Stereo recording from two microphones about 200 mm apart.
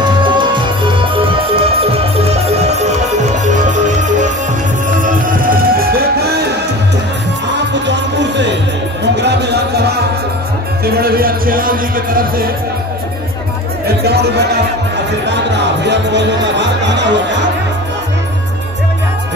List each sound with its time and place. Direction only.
0.0 s music: 25° right (ahead or behind); by 6.4 s 50° right (ahead or behind)
7.5 s music: 60° right (ahead or behind); by 12.3 s 45° right (ahead or behind)
13.8 s music: 55° right (ahead or behind)